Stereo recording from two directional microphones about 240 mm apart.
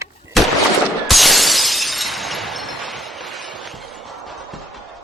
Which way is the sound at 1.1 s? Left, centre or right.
Centre.